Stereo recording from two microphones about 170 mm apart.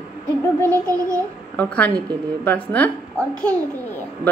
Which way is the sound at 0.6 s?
20° right (ahead or behind).